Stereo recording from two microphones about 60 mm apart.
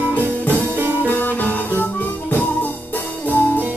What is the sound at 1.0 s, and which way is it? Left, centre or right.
Music, left.